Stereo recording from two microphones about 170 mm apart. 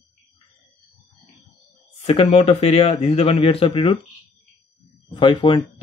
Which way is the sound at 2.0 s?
35° left (ahead or behind).